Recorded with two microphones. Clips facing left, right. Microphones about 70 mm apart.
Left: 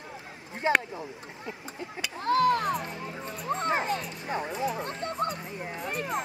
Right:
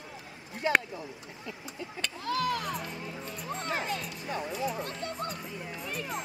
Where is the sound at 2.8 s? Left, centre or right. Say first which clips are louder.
Left 3 dB; left.